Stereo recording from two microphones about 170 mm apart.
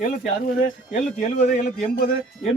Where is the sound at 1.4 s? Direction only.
50° left (ahead or behind).